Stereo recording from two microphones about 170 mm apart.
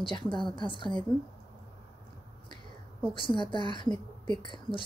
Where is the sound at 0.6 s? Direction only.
30° left (ahead or behind).